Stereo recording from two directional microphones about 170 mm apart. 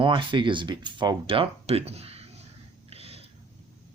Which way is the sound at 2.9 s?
35° right (ahead or behind).